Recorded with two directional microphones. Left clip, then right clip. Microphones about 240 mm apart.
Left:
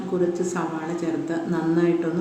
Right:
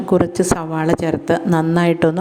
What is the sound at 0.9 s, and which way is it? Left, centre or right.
A woman's voice, right.